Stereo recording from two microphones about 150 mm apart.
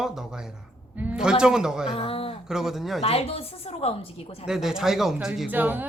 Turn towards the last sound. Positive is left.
turn(degrees=-10)  # may be behind; listen again after turning